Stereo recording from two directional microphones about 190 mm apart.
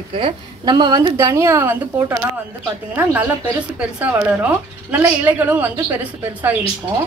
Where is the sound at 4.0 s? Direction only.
10° right (ahead or behind).